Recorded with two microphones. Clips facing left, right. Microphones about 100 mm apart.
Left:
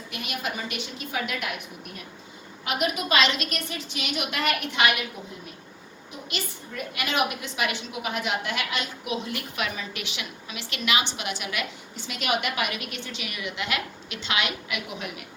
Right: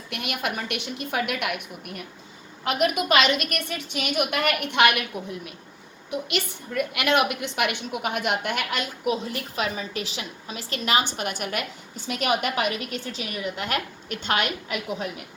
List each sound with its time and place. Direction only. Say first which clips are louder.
0.1 s a woman's voice: right 3 dB; 60° right (ahead or behind)
6.1 s a woman's voice: right 7 dB; 65° right (ahead or behind); by 15.1 s 40° right (ahead or behind)